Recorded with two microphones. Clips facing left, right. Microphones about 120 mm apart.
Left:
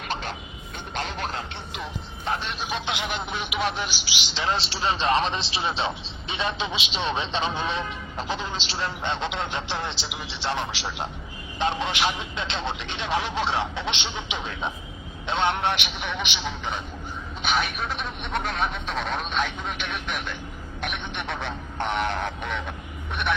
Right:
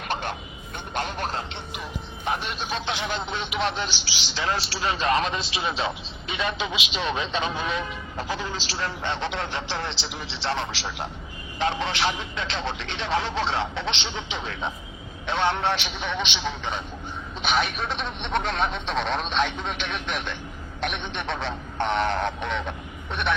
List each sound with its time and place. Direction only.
0.1 s music: 55° right (ahead or behind)
0.9 s speech: 45° right (ahead or behind)
2.2 s a man's voice: 15° right (ahead or behind)
2.6 s a man's voice: 15° left (ahead or behind)
17.7 s speech: 10° left (ahead or behind)